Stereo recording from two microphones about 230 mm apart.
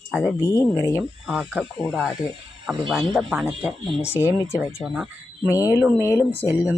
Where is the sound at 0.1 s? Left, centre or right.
Centre.